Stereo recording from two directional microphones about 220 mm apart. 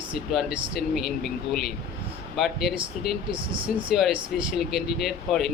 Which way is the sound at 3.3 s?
20° right (ahead or behind).